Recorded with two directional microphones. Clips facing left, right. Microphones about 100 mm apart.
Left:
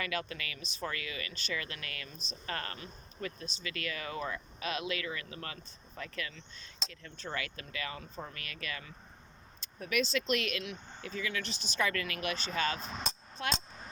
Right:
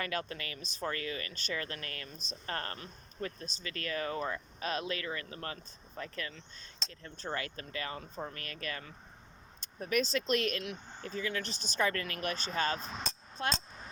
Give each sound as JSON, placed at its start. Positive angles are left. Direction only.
{"t": 0.0, "sound": "speech", "side_deg": -40}